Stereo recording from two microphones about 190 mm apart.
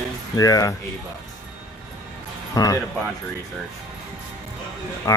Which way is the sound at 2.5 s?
20° left (ahead or behind).